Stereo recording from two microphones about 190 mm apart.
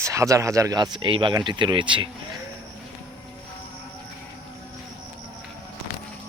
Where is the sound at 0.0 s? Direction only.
15° right (ahead or behind).